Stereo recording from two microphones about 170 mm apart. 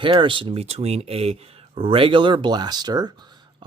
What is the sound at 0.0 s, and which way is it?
Speech, 30° right (ahead or behind).